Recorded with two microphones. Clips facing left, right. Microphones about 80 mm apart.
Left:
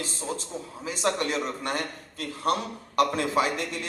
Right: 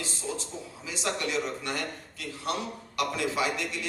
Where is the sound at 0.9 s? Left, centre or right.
Left.